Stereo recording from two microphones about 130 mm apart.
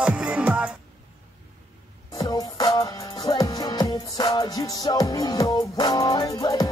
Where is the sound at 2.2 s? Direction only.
30° left (ahead or behind).